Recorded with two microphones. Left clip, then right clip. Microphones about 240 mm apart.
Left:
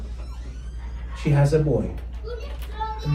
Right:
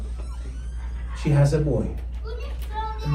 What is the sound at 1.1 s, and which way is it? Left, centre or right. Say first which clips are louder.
Speech: even; right.